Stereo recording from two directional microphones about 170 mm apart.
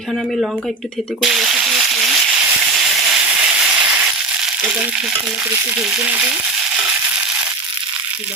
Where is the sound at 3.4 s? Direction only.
5° right (ahead or behind).